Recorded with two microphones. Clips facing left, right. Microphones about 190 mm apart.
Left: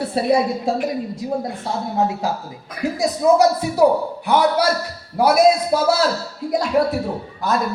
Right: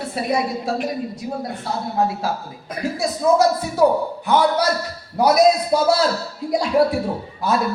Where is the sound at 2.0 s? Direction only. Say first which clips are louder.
Even; 20° left (ahead or behind); by 5.9 s centre (ahead or behind).